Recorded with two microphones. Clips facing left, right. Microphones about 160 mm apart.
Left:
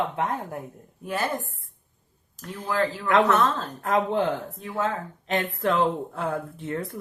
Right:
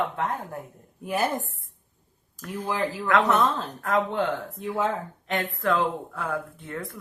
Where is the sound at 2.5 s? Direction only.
20° right (ahead or behind).